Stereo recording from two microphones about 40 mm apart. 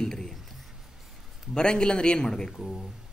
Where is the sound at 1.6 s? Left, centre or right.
Left.